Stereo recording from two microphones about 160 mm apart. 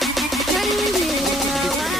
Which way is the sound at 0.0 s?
Centre (ahead or behind).